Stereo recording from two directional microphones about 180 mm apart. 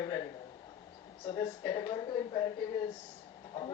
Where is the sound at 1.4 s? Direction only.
25° left (ahead or behind).